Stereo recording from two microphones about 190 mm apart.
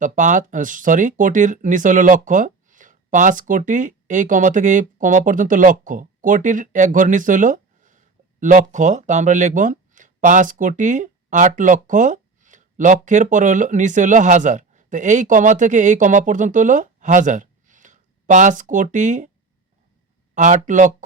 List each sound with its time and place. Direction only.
0.0 s speech: 40° right (ahead or behind)
20.3 s speech: 40° right (ahead or behind)